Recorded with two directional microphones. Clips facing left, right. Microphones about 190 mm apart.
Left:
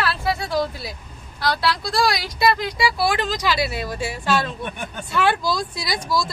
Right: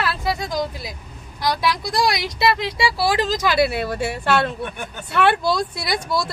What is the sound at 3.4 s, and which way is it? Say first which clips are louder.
Speech: right 4 dB; 55° right (ahead or behind).